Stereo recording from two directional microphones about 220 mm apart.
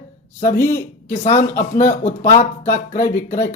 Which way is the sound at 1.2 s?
30° left (ahead or behind).